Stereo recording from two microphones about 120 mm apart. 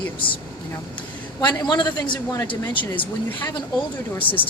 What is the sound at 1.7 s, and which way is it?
Speech, 35° left (ahead or behind).